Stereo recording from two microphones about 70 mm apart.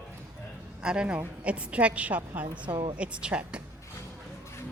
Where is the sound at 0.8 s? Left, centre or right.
Centre.